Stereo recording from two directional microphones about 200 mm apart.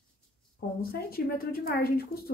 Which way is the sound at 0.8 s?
50° left (ahead or behind).